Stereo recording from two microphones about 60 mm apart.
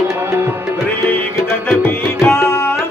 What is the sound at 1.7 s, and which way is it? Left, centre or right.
Tabla, left.